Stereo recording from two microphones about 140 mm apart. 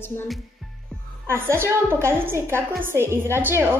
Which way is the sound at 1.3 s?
15° right (ahead or behind).